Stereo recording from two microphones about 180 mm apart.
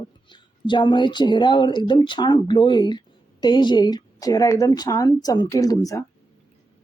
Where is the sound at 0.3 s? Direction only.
25° left (ahead or behind).